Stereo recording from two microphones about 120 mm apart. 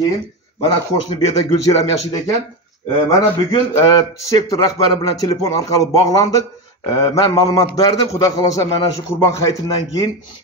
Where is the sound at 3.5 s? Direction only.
30° left (ahead or behind).